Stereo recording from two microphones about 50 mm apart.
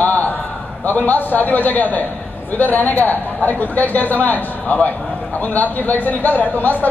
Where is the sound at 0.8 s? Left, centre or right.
Left.